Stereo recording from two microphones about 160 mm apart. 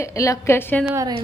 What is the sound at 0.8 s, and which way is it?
Speech, 20° right (ahead or behind).